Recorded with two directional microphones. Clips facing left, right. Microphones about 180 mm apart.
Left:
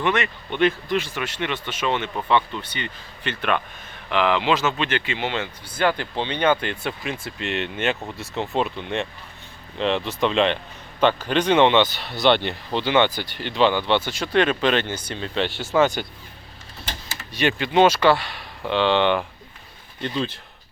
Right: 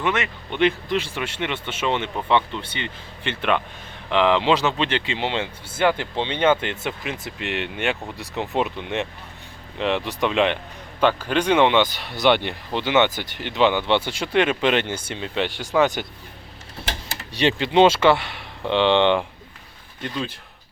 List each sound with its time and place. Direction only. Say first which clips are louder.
0.0 s speech: left 1 dB; 15° right (ahead or behind)
15.2 s speech: left 1 dB; 15° right (ahead or behind)
17.4 s speech: right 1 dB; 25° right (ahead or behind)